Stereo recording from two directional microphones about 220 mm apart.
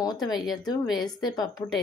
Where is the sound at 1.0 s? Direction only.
20° left (ahead or behind).